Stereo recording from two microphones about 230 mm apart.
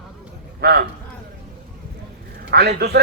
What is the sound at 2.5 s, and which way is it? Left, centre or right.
Speech, right.